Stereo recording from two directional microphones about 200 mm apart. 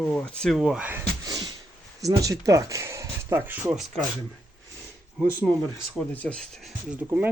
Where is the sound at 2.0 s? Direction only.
15° right (ahead or behind).